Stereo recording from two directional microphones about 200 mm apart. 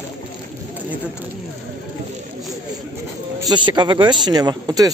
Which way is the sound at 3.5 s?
20° right (ahead or behind).